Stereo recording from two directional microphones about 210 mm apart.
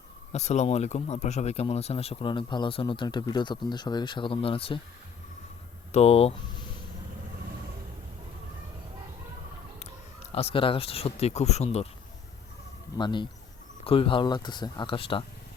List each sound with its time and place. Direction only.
0.3 s speech: 30° left (ahead or behind)
5.9 s speech: 30° left (ahead or behind)
10.3 s speech: 25° left (ahead or behind)
13.0 s speech: 20° left (ahead or behind)